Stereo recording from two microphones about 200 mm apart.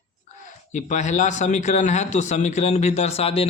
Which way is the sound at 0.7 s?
35° left (ahead or behind).